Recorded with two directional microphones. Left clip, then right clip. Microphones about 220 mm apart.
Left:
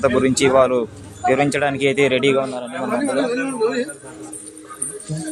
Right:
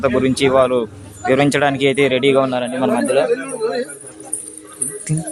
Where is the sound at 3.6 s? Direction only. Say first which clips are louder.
Even; 15° left (ahead or behind).